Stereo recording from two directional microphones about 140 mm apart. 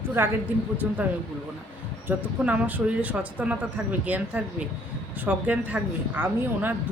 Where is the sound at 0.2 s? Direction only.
15° right (ahead or behind).